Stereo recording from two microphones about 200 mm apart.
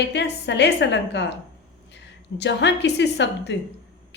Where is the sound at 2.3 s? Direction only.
60° left (ahead or behind).